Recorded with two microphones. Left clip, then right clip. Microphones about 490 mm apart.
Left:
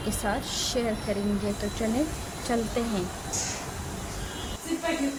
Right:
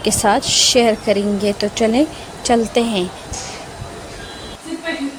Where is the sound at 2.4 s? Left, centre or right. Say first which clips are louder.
Right 14 dB; left.